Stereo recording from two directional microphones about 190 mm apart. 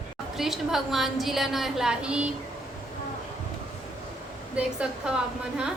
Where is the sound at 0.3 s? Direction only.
Centre (ahead or behind).